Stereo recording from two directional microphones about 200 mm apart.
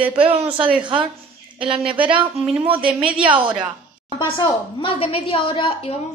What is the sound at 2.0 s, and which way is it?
Speech, 25° right (ahead or behind).